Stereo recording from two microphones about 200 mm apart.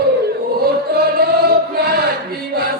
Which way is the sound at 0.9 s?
50° right (ahead or behind).